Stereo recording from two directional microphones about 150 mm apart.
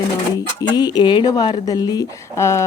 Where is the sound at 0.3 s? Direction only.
25° left (ahead or behind).